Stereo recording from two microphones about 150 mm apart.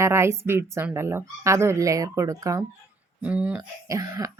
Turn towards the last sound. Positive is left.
turn(degrees=-20)  # may be behind; listen again after turning